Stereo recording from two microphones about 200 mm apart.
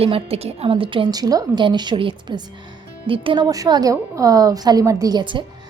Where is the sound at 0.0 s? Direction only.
30° right (ahead or behind).